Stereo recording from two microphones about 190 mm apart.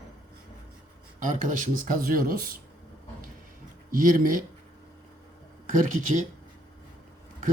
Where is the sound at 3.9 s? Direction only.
45° right (ahead or behind).